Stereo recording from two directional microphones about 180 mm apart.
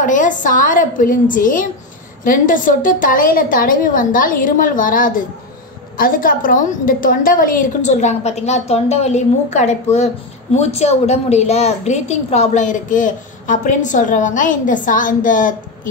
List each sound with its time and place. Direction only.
0.0 s a woman's voice: 45° left (ahead or behind)